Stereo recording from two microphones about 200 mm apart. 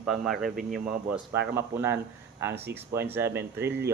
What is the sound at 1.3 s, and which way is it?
Speech, 55° right (ahead or behind).